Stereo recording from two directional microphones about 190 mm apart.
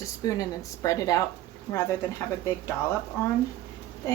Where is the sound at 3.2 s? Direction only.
15° left (ahead or behind).